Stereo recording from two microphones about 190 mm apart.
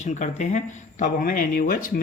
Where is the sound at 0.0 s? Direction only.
40° left (ahead or behind).